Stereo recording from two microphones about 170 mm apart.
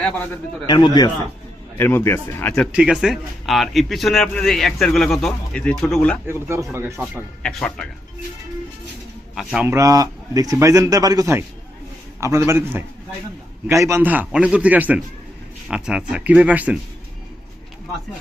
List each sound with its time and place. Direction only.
0.7 s a man's voice: 25° left (ahead or behind)
1.8 s speech: 15° left (ahead or behind)
2.6 s a man's voice: 5° right (ahead or behind)
6.2 s a man's voice: 15° right (ahead or behind)
9.3 s a man's voice: centre (ahead or behind)
9.6 s a man's voice: 20° right (ahead or behind)